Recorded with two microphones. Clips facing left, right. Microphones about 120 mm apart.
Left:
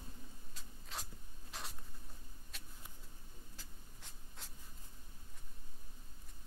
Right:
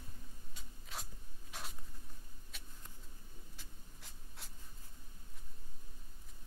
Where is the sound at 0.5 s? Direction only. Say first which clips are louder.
Even; centre (ahead or behind).